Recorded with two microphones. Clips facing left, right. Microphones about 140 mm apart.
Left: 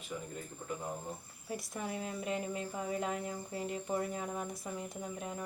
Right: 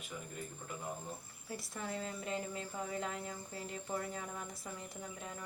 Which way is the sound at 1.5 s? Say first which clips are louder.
Left 2 dB; 20° left (ahead or behind).